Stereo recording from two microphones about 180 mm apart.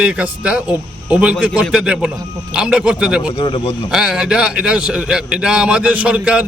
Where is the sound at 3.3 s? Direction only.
30° left (ahead or behind).